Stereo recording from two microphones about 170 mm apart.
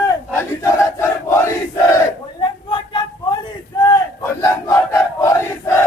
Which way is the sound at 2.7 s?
30° left (ahead or behind).